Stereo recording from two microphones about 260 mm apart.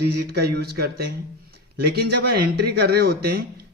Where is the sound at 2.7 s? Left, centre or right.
Right.